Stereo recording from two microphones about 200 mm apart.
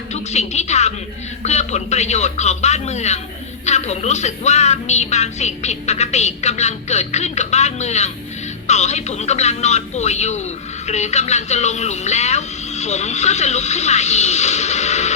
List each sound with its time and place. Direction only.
0.1 s a woman's voice: 35° left (ahead or behind)